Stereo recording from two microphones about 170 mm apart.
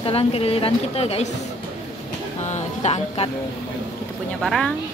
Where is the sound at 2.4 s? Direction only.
40° left (ahead or behind).